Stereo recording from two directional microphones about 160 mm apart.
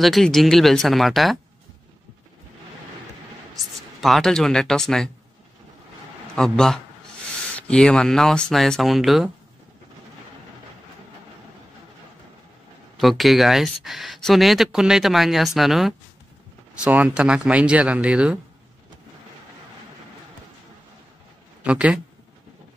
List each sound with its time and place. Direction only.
0.0 s speech: centre (ahead or behind)
3.5 s speech: centre (ahead or behind)
6.3 s speech: 5° left (ahead or behind)
13.2 s speech: centre (ahead or behind)
21.6 s speech: 5° right (ahead or behind)